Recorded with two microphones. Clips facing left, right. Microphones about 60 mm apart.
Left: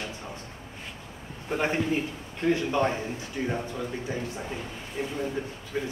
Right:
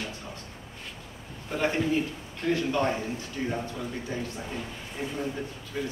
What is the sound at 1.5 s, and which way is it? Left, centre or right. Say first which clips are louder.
A man's voice: even; left.